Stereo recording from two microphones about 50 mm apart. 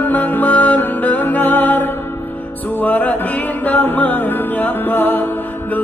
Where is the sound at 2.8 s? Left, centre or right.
Left.